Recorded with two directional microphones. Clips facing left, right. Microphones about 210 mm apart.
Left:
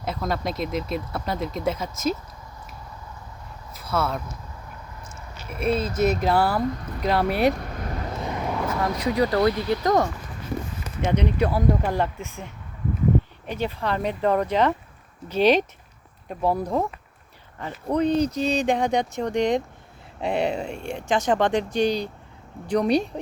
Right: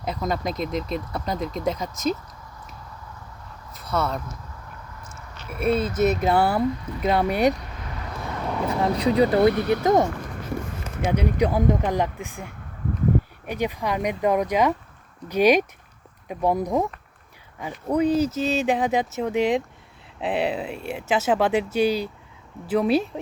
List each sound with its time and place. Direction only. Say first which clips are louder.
0.0 s speech: right 1 dB; centre (ahead or behind)
3.8 s speech: even; centre (ahead or behind)
5.5 s speech: right 2 dB; centre (ahead or behind)
6.3 s speech: right 1 dB; 20° right (ahead or behind)
7.0 s speech: right 1 dB; centre (ahead or behind)
7.5 s a sound: left 5 dB; 45° left (ahead or behind)
8.2 s vehicle: even; 15° left (ahead or behind)
8.7 s speech: right 5 dB; 30° right (ahead or behind)
9.5 s speech: right 3 dB; 60° right (ahead or behind)
9.8 s speech: right 2 dB; 20° right (ahead or behind)
11.0 s speech: even; 10° right (ahead or behind)
13.5 s speech: right 1 dB; 15° right (ahead or behind)